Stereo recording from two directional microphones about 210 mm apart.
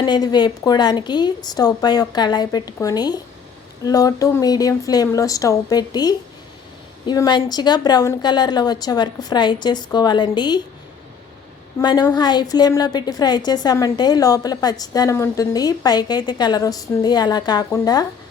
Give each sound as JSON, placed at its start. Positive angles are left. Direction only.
{"t": 0.0, "sound": "a woman's voice", "side_deg": 20}
{"t": 11.8, "sound": "a woman's voice", "side_deg": 20}